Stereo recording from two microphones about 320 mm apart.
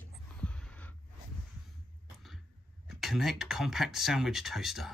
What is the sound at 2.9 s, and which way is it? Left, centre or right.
Speech, centre.